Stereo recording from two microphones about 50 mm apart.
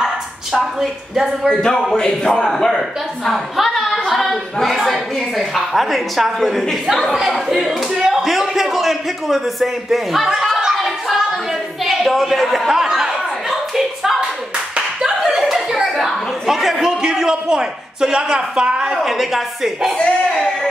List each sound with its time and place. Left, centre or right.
0.0 s speech: centre
1.5 s a man's voice: centre
10.6 s a sound: centre
12.8 s chuckle: centre
15.0 s a sound: centre
17.0 s a man's voice: centre
19.0 s a woman's voice: centre